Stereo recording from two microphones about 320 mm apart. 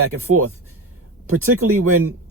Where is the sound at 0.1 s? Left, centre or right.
Right.